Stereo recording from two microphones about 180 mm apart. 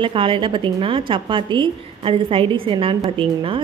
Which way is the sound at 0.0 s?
30° right (ahead or behind).